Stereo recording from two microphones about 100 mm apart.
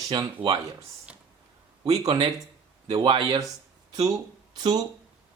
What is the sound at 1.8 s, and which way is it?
Speech, 40° right (ahead or behind).